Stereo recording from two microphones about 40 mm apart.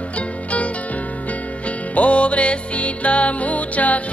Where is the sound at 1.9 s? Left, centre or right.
Left.